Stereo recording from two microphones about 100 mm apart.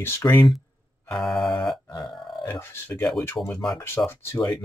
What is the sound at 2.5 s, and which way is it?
Speech, 20° left (ahead or behind).